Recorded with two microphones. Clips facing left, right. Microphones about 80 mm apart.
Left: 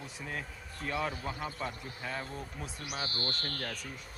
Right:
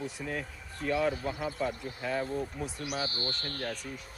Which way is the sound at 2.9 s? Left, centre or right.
Right.